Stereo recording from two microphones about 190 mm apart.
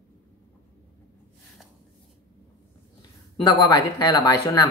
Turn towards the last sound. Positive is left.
turn(degrees=20)  # may be behind; listen again after turning